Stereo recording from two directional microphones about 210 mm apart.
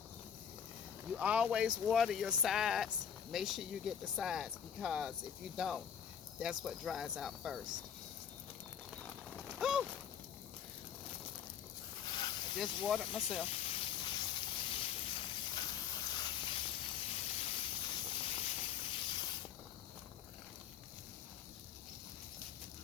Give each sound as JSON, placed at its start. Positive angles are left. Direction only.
{"t": 1.1, "sound": "speech", "side_deg": -5}
{"t": 9.6, "sound": "a sound", "side_deg": 0}
{"t": 12.0, "sound": "snake", "side_deg": 20}
{"t": 12.6, "sound": "speech", "side_deg": 25}
{"t": 13.1, "sound": "speech", "side_deg": -5}
{"t": 13.5, "sound": "snake", "side_deg": 25}